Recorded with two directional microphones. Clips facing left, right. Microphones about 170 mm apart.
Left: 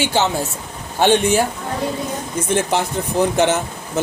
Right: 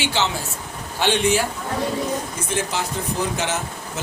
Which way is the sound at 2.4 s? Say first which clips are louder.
Left 8 dB; 60° left (ahead or behind).